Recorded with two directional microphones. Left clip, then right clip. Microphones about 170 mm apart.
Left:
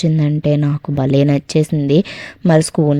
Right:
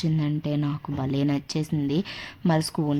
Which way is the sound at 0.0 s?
40° left (ahead or behind).